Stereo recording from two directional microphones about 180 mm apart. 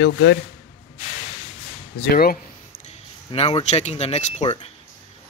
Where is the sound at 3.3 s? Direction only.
35° left (ahead or behind).